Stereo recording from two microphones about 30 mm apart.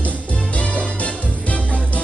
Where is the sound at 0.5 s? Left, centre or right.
Left.